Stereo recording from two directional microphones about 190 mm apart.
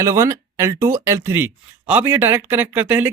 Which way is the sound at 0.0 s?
15° right (ahead or behind).